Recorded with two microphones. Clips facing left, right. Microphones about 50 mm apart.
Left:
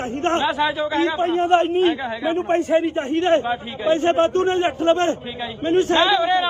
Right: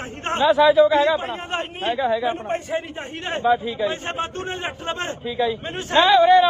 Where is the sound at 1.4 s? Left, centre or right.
Left.